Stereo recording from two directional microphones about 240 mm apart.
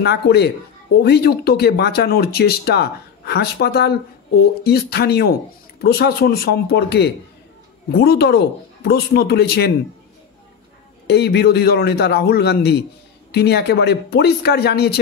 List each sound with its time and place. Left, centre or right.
0.0 s a man's voice: left
11.1 s a man's voice: left